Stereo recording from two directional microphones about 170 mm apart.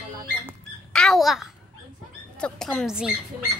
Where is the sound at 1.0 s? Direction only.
Centre (ahead or behind).